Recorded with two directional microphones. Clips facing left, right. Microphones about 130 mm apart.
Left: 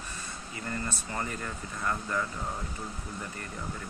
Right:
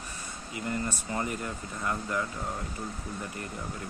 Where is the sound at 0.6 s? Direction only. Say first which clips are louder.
Right 3 dB; 15° right (ahead or behind).